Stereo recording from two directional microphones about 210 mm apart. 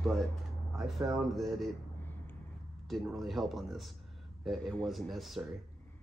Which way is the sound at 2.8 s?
Centre (ahead or behind).